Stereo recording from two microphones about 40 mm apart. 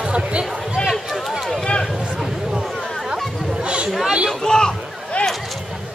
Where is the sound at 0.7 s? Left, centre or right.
Centre.